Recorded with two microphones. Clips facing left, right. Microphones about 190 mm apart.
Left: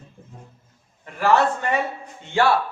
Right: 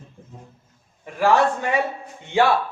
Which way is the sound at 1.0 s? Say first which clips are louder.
Right 1 dB; 15° right (ahead or behind).